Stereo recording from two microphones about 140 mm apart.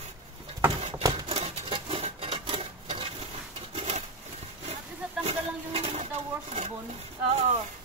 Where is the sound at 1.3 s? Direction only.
40° right (ahead or behind).